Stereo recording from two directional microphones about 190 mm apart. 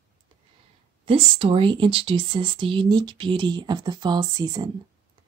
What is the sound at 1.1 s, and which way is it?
Speech, 30° right (ahead or behind).